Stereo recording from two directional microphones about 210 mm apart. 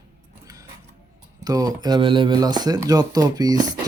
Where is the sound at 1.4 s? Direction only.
15° right (ahead or behind).